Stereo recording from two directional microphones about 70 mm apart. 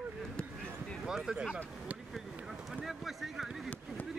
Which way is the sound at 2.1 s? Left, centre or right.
Centre.